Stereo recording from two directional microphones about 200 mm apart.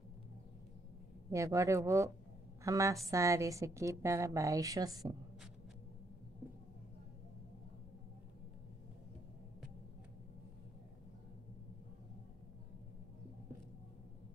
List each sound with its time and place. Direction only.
1.3 s a woman's voice: 15° right (ahead or behind)